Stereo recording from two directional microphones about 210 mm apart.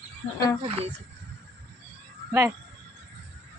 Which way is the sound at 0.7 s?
30° right (ahead or behind).